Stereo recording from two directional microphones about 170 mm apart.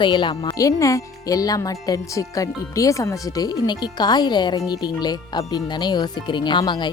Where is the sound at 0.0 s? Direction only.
30° left (ahead or behind).